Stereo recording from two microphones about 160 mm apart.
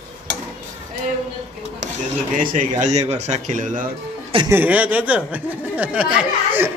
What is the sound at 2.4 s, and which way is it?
Speech, 50° right (ahead or behind).